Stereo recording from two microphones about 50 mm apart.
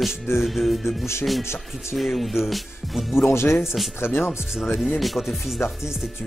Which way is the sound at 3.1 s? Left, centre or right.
Left.